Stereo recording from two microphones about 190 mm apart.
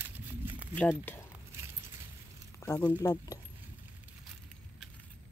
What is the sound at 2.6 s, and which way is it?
Speech, 15° left (ahead or behind).